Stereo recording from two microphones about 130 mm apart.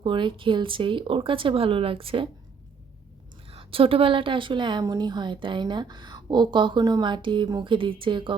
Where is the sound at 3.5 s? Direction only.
45° right (ahead or behind).